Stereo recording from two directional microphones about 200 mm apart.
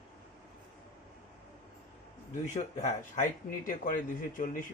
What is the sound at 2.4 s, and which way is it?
Speech, 35° left (ahead or behind).